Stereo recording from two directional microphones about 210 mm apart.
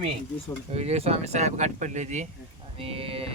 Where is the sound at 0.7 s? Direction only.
30° right (ahead or behind).